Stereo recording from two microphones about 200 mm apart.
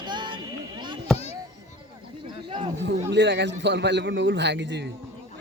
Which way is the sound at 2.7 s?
60° right (ahead or behind).